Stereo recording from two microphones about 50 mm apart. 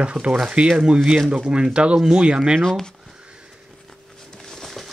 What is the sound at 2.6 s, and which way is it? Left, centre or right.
Speech, centre.